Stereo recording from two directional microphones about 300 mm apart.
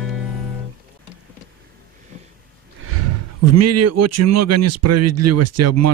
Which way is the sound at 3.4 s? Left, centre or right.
Right.